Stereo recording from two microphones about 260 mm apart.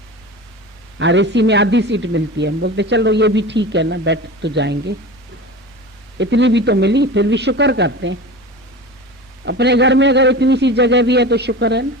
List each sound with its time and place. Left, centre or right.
0.9 s speech: right
6.1 s a man's voice: right
9.4 s a man's voice: right